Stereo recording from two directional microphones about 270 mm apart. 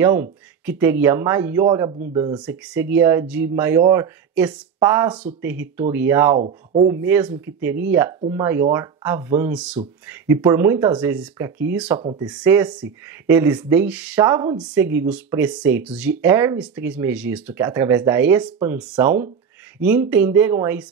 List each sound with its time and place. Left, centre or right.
0.0 s speech: centre
2.4 s speech: centre
6.3 s speech: right
6.9 s speech: centre
12.0 s speech: centre
12.3 s speech: centre